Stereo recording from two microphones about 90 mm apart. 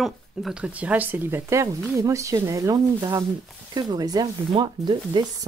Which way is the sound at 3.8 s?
50° right (ahead or behind).